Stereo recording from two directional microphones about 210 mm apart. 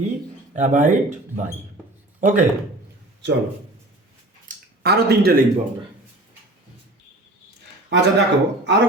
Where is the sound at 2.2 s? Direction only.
35° right (ahead or behind).